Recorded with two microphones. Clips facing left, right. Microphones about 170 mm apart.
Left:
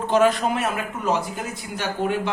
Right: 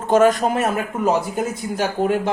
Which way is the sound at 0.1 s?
45° right (ahead or behind).